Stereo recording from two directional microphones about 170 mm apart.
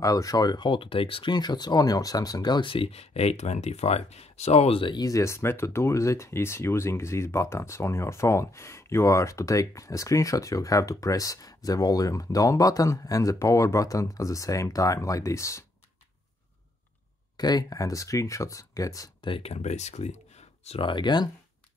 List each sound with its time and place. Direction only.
0.0 s speech: 20° left (ahead or behind)
17.4 s speech: 25° left (ahead or behind)
19.3 s speech: 40° left (ahead or behind)